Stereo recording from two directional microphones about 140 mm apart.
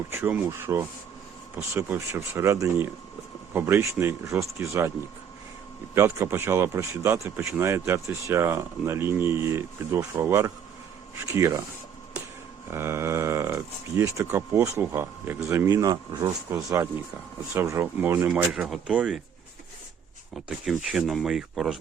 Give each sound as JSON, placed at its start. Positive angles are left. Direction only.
{"t": 0.1, "sound": "speech", "side_deg": -15}
{"t": 5.9, "sound": "speech", "side_deg": -15}
{"t": 12.7, "sound": "speech", "side_deg": -20}
{"t": 18.5, "sound": "speech", "side_deg": -5}
{"t": 20.3, "sound": "speech", "side_deg": 0}